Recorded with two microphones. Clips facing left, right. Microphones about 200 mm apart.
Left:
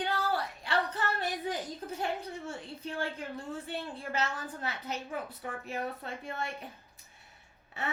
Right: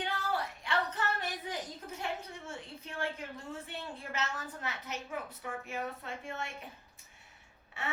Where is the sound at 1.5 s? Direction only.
35° left (ahead or behind).